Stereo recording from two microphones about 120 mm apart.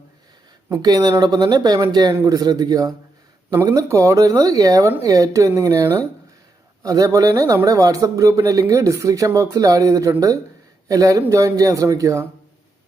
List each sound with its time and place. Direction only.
0.7 s speech: 30° right (ahead or behind)